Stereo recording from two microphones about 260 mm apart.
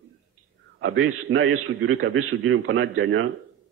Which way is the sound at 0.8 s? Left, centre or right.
Right.